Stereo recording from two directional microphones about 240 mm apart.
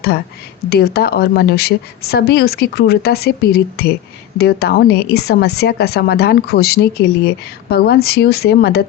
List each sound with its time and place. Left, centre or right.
0.7 s a woman's voice: left